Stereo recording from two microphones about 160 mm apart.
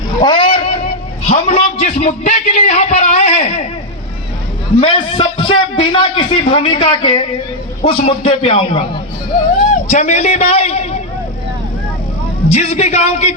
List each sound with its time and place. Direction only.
0.2 s a sound: 30° left (ahead or behind)
0.5 s vehicle: 40° left (ahead or behind)
1.3 s a man's voice: 40° left (ahead or behind)
4.8 s a man's voice: 35° left (ahead or behind)
9.9 s a man's voice: 45° left (ahead or behind)
12.5 s a man's voice: 45° left (ahead or behind)